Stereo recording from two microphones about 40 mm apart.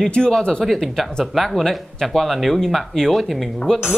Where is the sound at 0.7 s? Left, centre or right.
Centre.